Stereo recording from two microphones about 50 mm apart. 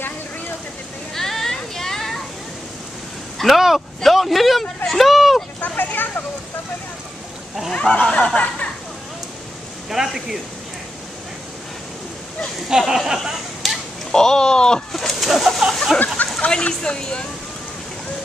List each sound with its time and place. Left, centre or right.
1.1 s a sound: centre
3.3 s speech: centre
5.6 s speech: left
7.7 s a woman's voice: left
9.8 s speech: centre
12.6 s a sound: centre
14.1 s speech: centre
14.9 s speech: centre
16.3 s a woman's voice: left